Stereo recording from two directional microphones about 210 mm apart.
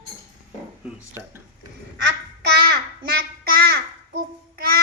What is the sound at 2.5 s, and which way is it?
Child singing, 50° right (ahead or behind).